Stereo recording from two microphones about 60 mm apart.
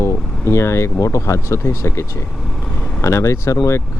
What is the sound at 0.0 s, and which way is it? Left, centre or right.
Speech, left.